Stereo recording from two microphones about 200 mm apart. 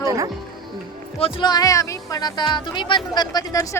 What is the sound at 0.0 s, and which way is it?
Music, 15° right (ahead or behind).